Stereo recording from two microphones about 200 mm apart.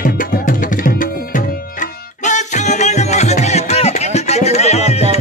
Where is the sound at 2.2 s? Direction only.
35° left (ahead or behind).